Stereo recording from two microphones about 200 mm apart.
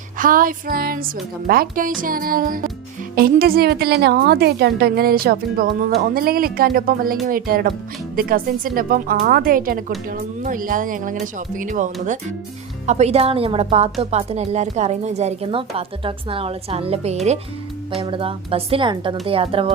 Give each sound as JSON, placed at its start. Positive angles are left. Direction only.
{"t": 0.2, "sound": "speech", "side_deg": -45}